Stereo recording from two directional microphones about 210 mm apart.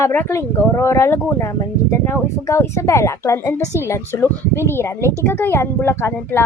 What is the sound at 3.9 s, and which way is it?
Speech, 15° left (ahead or behind).